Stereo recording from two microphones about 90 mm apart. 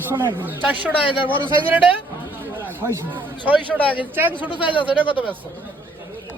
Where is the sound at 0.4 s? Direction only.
15° right (ahead or behind).